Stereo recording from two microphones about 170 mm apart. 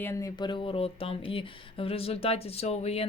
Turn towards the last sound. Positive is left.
turn(degrees=40)  # may be behind; listen again after turning